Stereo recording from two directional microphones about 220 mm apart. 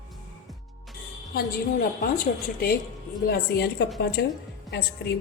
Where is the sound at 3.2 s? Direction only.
45° left (ahead or behind).